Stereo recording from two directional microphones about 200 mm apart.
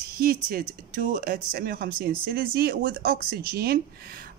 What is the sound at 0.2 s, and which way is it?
Speech, 50° right (ahead or behind).